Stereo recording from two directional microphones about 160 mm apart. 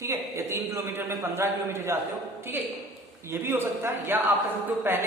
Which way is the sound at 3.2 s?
15° right (ahead or behind).